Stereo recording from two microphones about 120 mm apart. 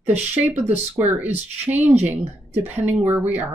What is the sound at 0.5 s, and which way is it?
Speech, 65° right (ahead or behind).